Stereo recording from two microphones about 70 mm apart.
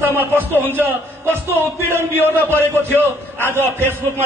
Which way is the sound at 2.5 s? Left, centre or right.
Right.